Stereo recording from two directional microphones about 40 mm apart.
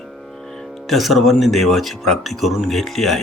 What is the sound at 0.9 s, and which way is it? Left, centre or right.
Speech, centre.